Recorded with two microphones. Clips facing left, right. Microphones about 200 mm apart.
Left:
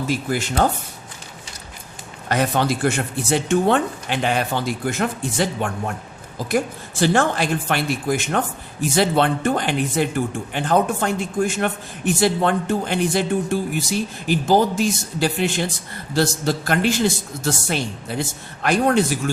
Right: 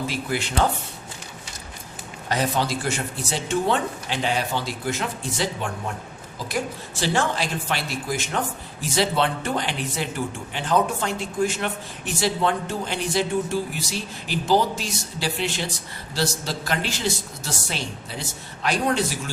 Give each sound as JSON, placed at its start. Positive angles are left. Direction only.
{"t": 0.1, "sound": "a man's voice", "side_deg": 45}
{"t": 2.3, "sound": "speech", "side_deg": 60}
{"t": 7.0, "sound": "a man's voice", "side_deg": 55}